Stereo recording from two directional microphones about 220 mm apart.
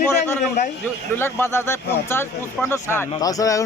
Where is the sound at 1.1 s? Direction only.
10° left (ahead or behind).